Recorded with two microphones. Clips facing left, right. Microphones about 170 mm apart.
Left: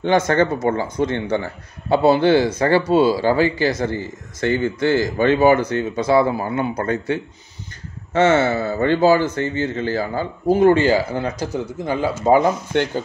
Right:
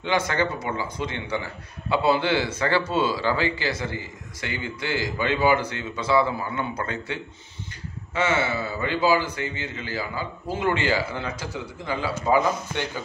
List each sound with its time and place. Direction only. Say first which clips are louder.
0.0 s speech: left 8 dB; 45° left (ahead or behind)